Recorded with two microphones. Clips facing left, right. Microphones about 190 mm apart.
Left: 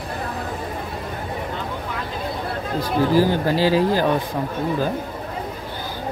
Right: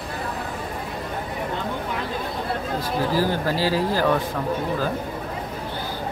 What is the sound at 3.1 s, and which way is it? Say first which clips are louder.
Speech: left 5 dB; 20° left (ahead or behind).